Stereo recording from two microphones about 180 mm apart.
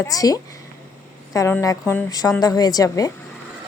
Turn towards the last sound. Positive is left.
turn(degrees=20)  # may be behind; listen again after turning